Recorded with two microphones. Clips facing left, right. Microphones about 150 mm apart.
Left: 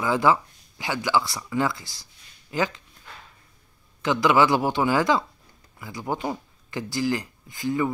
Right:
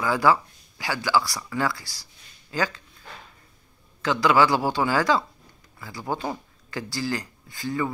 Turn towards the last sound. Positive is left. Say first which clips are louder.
# left 3 dB
turn(degrees=20)  # may be behind; listen again after turning